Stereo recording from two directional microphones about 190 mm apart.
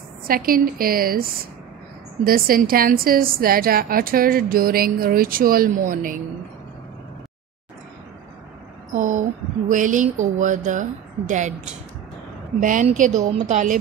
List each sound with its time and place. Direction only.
0.3 s a woman's voice: 50° right (ahead or behind)
8.9 s a sound: 40° right (ahead or behind)
9.7 s a woman's voice: 40° right (ahead or behind)